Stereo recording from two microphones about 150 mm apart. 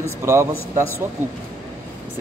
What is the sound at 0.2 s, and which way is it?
Speech, 20° right (ahead or behind).